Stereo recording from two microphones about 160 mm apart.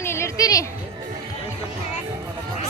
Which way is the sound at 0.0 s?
15° left (ahead or behind).